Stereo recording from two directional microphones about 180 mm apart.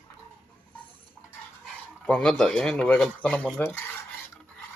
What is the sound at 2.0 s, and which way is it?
Speech, 5° left (ahead or behind).